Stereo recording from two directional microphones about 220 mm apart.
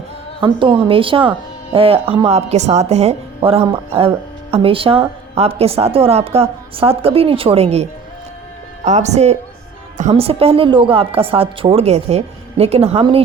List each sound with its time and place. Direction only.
0.3 s a woman's voice: 20° right (ahead or behind)